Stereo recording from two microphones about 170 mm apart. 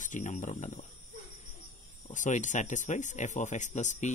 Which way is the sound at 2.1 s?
45° left (ahead or behind).